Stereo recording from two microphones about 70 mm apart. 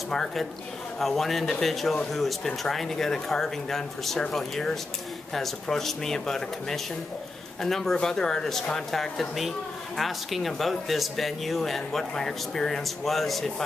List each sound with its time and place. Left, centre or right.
0.1 s speech: centre